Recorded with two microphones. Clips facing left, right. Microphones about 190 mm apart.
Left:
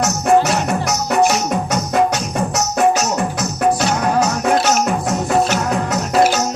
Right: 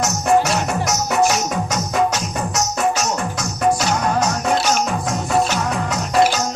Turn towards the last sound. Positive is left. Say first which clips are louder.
# left 3 dB
turn(degrees=0)  # may be behind; listen again after turning